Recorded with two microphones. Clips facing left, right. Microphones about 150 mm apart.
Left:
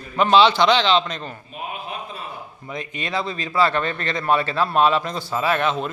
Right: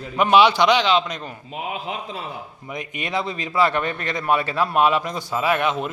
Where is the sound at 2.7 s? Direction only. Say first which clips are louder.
Even; 20° right (ahead or behind).